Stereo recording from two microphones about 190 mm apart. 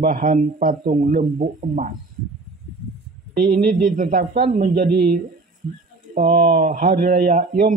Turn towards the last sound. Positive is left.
turn(degrees=-45)  # may be behind; listen again after turning